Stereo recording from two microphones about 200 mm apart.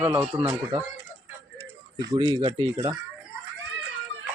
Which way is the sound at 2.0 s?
20° right (ahead or behind).